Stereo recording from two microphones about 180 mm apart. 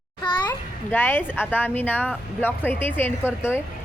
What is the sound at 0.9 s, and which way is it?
A woman's voice, 10° left (ahead or behind).